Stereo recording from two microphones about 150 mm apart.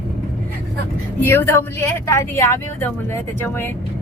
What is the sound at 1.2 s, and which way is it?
Speech, 15° left (ahead or behind).